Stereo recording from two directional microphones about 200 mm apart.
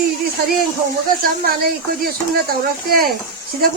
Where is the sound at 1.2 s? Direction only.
50° right (ahead or behind).